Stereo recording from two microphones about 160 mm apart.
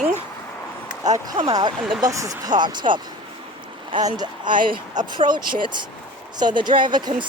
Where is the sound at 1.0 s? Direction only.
25° right (ahead or behind).